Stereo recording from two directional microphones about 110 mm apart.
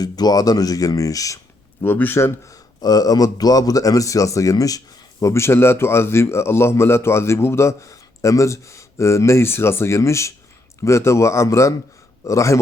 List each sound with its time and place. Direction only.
0.0 s speech: 35° left (ahead or behind)
1.8 s a man's voice: 20° left (ahead or behind)